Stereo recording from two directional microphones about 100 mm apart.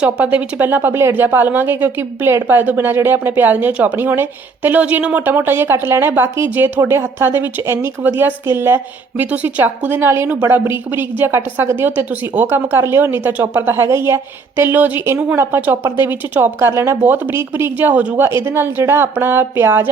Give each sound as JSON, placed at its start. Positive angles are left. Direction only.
{"t": 0.0, "sound": "speech", "side_deg": -10}